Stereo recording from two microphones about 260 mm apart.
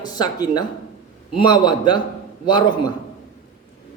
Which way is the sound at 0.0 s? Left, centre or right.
Centre.